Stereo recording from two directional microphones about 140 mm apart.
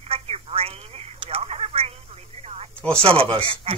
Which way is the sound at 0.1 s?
45° right (ahead or behind).